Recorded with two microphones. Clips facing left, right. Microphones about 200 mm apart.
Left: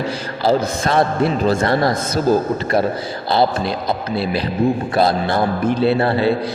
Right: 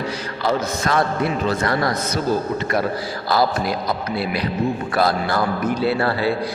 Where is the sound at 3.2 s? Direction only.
25° left (ahead or behind).